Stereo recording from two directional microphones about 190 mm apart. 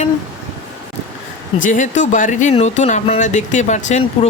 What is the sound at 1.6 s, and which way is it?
Speech, 40° left (ahead or behind).